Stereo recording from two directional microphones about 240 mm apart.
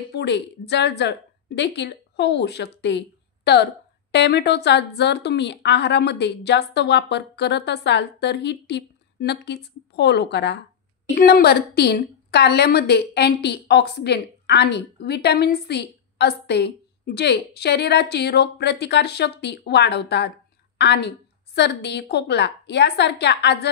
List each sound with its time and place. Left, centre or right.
0.1 s a woman's voice: left